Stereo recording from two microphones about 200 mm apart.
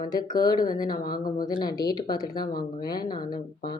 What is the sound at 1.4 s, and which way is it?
Speech, 20° left (ahead or behind).